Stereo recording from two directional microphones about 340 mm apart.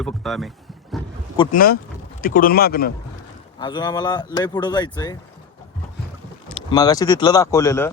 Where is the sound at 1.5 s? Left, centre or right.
Left.